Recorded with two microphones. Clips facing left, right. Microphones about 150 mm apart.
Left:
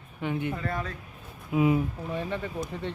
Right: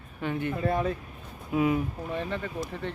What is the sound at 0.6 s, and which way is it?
Speech, 25° right (ahead or behind).